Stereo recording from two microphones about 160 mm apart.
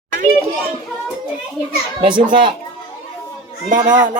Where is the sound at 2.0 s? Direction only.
30° right (ahead or behind).